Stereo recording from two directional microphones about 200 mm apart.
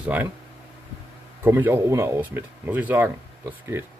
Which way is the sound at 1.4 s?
10° right (ahead or behind).